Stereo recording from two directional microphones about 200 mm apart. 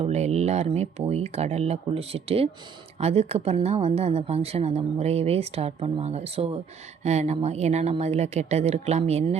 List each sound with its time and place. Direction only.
0.0 s speech: 35° right (ahead or behind)